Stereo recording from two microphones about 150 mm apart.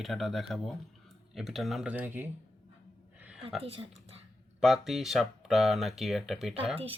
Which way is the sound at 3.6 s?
40° right (ahead or behind).